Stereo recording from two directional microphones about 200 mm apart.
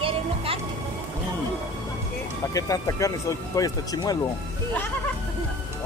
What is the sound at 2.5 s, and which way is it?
A man's voice, 15° left (ahead or behind).